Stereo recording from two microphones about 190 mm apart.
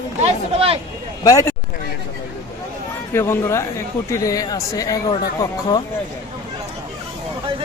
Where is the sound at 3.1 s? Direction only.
15° left (ahead or behind).